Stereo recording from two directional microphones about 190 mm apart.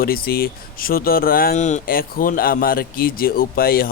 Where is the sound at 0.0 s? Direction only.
50° left (ahead or behind).